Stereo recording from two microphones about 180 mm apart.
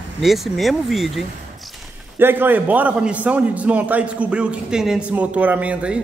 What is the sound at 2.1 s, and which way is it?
A man's voice, 10° right (ahead or behind).